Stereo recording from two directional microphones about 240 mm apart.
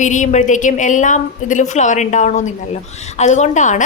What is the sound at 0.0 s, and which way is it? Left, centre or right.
A woman's voice, left.